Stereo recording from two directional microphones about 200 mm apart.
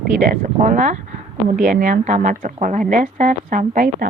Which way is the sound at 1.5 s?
40° right (ahead or behind).